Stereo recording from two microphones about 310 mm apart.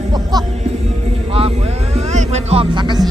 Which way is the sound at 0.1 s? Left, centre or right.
Centre.